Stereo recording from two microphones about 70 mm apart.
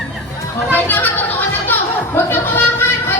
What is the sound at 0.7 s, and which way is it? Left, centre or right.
Chatter, left.